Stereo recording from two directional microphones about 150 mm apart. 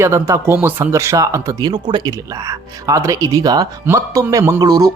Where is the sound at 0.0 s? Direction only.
15° right (ahead or behind).